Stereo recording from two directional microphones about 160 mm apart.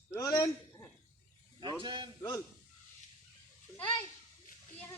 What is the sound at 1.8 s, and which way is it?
Speech, 30° right (ahead or behind).